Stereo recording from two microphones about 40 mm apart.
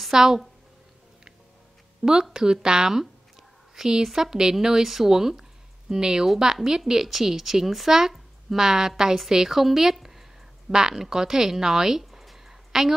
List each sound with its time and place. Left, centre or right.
0.1 s speech: centre
2.0 s speech: right
2.3 s a woman's voice: centre